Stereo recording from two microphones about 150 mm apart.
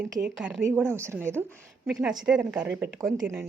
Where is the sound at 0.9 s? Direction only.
15° right (ahead or behind).